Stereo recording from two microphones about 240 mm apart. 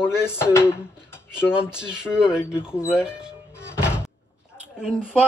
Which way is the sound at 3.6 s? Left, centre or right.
Centre.